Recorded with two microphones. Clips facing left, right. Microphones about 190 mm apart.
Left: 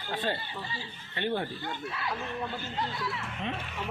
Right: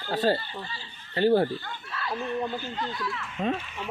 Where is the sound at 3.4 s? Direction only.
45° right (ahead or behind).